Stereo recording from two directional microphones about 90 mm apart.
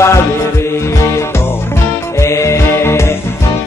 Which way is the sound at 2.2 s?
35° left (ahead or behind).